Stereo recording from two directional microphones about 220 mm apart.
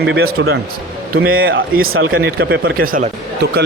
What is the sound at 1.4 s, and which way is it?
Speech, 60° right (ahead or behind).